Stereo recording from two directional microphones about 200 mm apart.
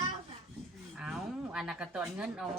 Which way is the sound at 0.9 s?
Centre (ahead or behind).